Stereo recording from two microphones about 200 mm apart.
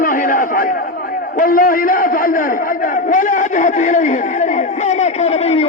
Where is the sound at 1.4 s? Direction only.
45° left (ahead or behind).